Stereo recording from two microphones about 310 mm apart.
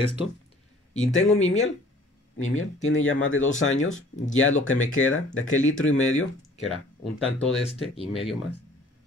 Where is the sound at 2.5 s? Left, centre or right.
Left.